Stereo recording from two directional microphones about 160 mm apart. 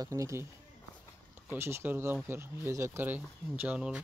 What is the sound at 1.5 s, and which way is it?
Speech, 15° right (ahead or behind).